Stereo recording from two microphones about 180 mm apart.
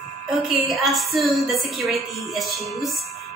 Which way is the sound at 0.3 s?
Centre (ahead or behind).